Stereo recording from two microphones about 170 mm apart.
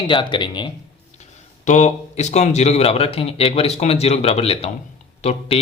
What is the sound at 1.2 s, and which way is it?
Speech, 45° left (ahead or behind).